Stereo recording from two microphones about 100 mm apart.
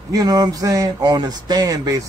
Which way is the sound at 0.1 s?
40° right (ahead or behind).